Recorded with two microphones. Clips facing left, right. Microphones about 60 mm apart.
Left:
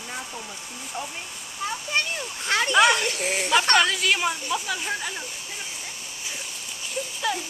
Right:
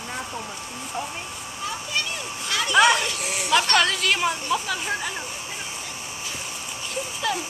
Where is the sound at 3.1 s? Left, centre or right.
Left.